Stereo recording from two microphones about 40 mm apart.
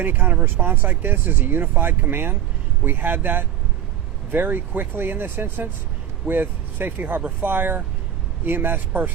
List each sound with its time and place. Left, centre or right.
0.0 s speech: right
2.1 s speech: right